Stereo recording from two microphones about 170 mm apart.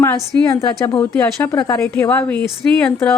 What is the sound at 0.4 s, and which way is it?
Speech, 20° left (ahead or behind).